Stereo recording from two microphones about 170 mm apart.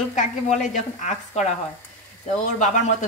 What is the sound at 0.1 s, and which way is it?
Speech, 45° left (ahead or behind).